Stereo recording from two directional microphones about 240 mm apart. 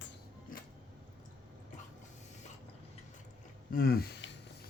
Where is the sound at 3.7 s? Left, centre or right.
Left.